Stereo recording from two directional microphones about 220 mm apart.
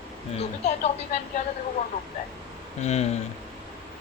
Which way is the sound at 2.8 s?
30° left (ahead or behind).